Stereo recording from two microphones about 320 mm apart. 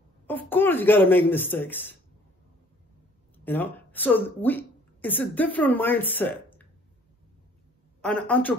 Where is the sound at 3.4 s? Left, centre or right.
Centre.